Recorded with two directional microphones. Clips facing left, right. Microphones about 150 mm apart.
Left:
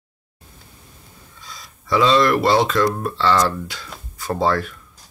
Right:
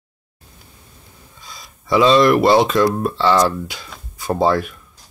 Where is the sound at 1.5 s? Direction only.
15° right (ahead or behind).